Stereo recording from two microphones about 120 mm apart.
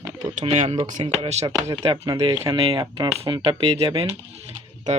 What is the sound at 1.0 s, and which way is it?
Speech, 50° right (ahead or behind).